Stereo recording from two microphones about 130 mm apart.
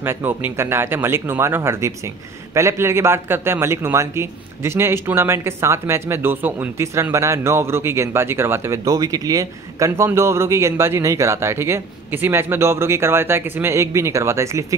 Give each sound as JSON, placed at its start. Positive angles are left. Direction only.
{"t": 0.0, "sound": "a man's voice", "side_deg": -20}